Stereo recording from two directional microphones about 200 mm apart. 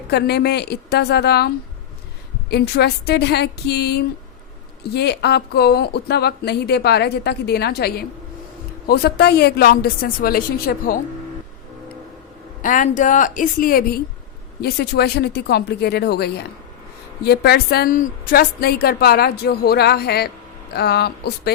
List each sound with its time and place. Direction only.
0.1 s a woman's voice: 55° left (ahead or behind)
2.5 s a woman's voice: 55° left (ahead or behind)
12.6 s a woman's voice: 40° left (ahead or behind)